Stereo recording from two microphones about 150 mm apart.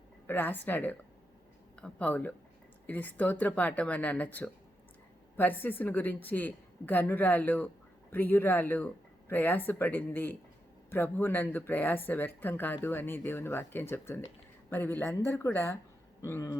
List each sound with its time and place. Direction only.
0.3 s speech: 15° left (ahead or behind)